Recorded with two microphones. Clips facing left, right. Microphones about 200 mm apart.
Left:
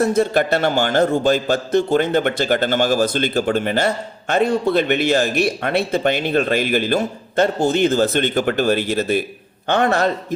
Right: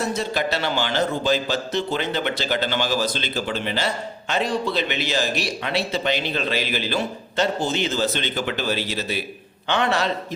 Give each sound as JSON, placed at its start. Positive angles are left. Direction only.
{"t": 0.0, "sound": "a man's voice", "side_deg": 55}